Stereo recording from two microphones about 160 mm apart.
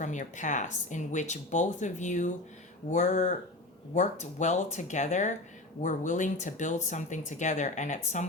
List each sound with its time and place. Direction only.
0.0 s speech: 50° left (ahead or behind)